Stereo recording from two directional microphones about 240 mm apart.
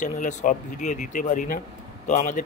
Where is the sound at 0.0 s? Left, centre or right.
Left.